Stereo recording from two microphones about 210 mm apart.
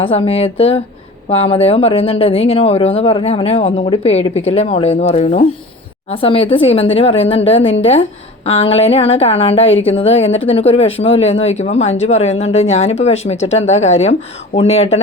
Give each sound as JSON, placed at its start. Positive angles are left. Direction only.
{"t": 0.0, "sound": "speech", "side_deg": 25}